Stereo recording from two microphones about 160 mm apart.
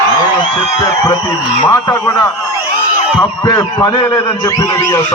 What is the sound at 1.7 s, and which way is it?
Speech, 20° left (ahead or behind).